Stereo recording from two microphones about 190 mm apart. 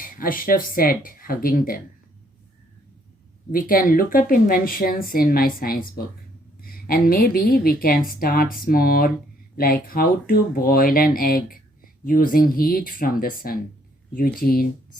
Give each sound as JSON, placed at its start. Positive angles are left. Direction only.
{"t": 0.0, "sound": "a woman's voice", "side_deg": 45}
{"t": 3.5, "sound": "a woman's voice", "side_deg": 45}